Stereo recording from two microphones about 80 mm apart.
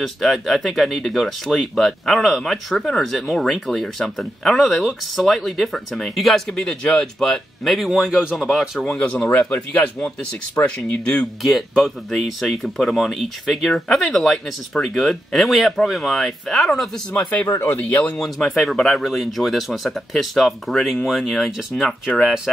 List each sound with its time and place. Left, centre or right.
0.0 s speech: centre
8.8 s speech: centre
11.4 s speech: centre
17.1 s speech: centre
17.5 s speech: left
17.8 s speech: centre
18.2 s speech: centre